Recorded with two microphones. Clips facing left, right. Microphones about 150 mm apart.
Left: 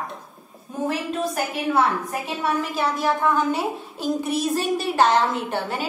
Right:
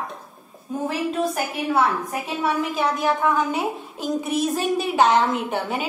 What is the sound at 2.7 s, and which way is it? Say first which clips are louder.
A woman's voice: right 1 dB; 5° right (ahead or behind).